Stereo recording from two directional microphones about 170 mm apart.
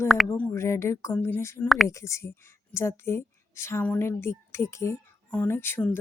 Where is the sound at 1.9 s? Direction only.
15° left (ahead or behind).